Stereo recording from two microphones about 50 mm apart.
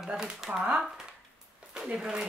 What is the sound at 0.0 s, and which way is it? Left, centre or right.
Speech, centre.